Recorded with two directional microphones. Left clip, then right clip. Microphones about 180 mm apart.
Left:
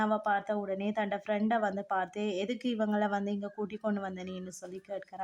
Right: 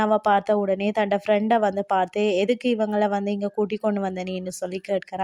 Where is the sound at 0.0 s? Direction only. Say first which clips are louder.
Right 10 dB; 40° right (ahead or behind).